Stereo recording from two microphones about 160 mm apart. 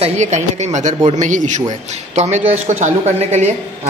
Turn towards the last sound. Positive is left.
turn(degrees=-45)  # may be behind; listen again after turning